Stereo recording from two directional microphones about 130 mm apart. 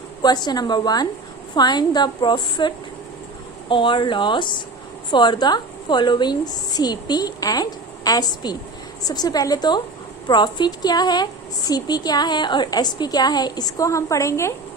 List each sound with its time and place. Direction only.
0.2 s a woman's voice: 30° left (ahead or behind)